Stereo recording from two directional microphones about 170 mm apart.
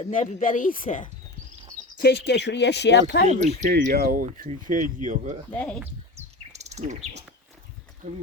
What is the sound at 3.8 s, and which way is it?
Speech, 60° right (ahead or behind).